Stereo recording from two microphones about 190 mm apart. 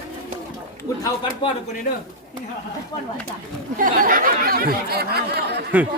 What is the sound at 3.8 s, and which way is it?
Speech, 45° right (ahead or behind).